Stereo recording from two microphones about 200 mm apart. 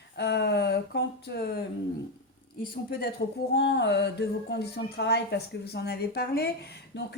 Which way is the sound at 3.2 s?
55° left (ahead or behind).